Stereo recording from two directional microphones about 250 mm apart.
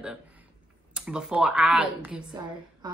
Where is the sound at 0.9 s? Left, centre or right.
Centre.